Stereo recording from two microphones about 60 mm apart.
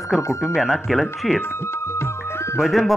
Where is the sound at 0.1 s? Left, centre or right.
Centre.